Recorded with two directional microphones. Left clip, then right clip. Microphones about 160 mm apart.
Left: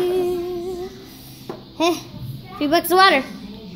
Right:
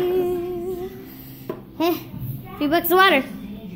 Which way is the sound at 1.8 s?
10° left (ahead or behind).